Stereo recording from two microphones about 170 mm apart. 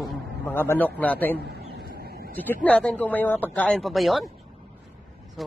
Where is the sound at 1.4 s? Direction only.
65° right (ahead or behind).